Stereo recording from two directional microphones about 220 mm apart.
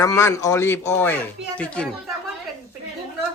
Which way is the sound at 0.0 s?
15° left (ahead or behind).